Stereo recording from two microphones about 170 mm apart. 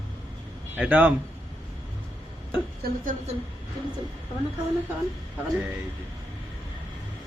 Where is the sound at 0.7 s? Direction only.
10° right (ahead or behind).